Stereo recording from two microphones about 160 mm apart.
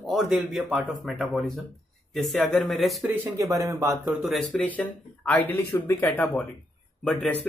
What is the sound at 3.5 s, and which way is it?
Speech, 20° right (ahead or behind).